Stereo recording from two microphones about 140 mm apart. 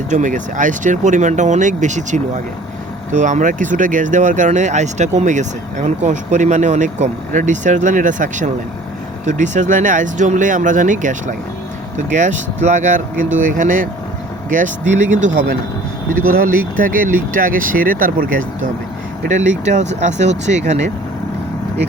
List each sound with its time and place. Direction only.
0.1 s speech: 65° right (ahead or behind)
16.0 s speech: 85° right
19.2 s speech: 60° right (ahead or behind)